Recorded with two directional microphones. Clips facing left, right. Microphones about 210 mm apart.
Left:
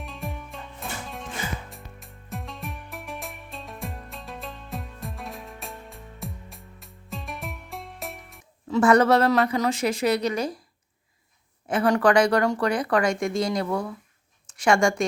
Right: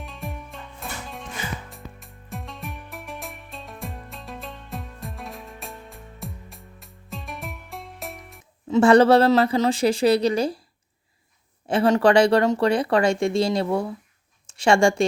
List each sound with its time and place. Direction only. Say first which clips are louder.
0.0 s music: even; centre (ahead or behind)
8.7 s a woman's voice: right 4 dB; 30° right (ahead or behind)
11.7 s speech: right 3 dB; 25° right (ahead or behind)